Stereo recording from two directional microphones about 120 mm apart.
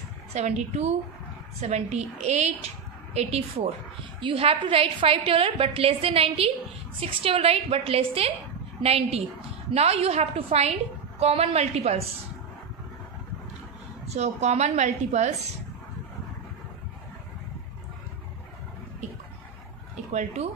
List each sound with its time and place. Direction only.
0.3 s a woman's voice: 65° right (ahead or behind)
14.0 s a woman's voice: 65° right (ahead or behind)
20.1 s speech: 70° right (ahead or behind)